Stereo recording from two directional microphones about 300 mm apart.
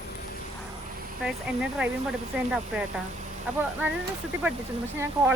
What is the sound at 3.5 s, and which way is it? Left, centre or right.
Speech, centre.